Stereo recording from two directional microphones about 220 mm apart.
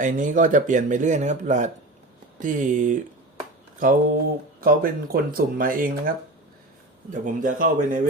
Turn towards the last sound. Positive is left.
turn(degrees=-35)  # may be behind; listen again after turning